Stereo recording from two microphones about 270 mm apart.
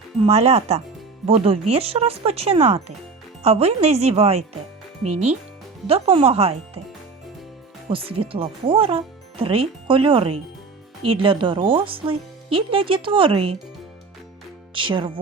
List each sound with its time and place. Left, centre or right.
0.2 s speech: right
7.9 s speech: right
14.7 s speech: centre